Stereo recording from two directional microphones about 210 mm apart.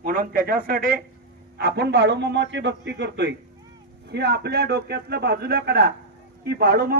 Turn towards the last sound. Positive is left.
turn(degrees=-45)  # may be behind; listen again after turning